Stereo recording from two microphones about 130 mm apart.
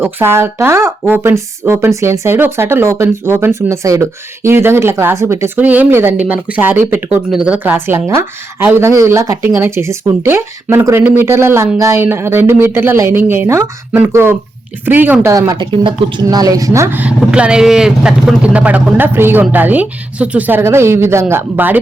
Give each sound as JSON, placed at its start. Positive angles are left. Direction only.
{"t": 0.0, "sound": "speech", "side_deg": -20}
{"t": 15.3, "sound": "speech", "side_deg": -25}